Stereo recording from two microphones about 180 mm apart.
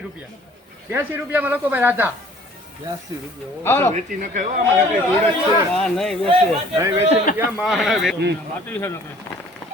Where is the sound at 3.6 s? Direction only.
15° left (ahead or behind).